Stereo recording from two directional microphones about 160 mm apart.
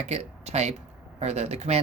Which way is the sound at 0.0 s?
40° right (ahead or behind).